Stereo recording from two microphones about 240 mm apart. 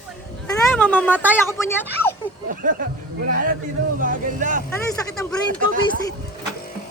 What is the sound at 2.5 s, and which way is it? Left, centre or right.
Speech, right.